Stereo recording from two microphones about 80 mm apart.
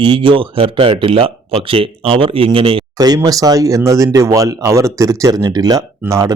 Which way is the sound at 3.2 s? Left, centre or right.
Right.